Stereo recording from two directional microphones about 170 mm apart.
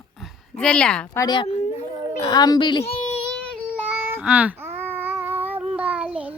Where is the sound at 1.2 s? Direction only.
25° left (ahead or behind).